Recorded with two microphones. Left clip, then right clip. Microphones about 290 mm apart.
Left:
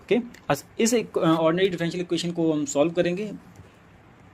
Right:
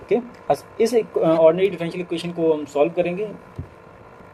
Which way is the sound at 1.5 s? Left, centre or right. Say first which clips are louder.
Right 2 dB; left.